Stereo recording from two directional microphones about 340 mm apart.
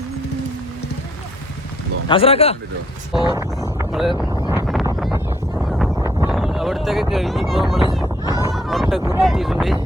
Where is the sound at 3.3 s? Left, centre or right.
Centre.